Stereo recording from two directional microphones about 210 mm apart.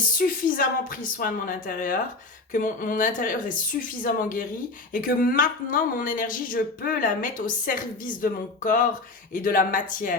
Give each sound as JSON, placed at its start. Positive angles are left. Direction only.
{"t": 0.2, "sound": "speech", "side_deg": 40}